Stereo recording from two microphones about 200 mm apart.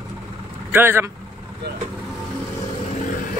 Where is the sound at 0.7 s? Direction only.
10° right (ahead or behind).